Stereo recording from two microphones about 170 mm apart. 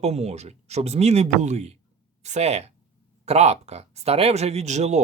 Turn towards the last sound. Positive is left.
turn(degrees=-40)  # may be behind; listen again after turning